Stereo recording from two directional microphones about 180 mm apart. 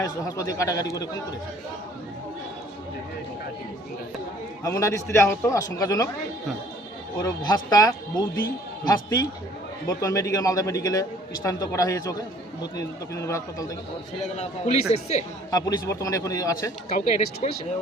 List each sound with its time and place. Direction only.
0.0 s a man's voice: 20° left (ahead or behind)
4.6 s a man's voice: 20° left (ahead or behind)
7.2 s a man's voice: 20° left (ahead or behind)
14.3 s speech: 40° left (ahead or behind)
15.4 s speech: 20° left (ahead or behind)
16.9 s speech: 40° left (ahead or behind)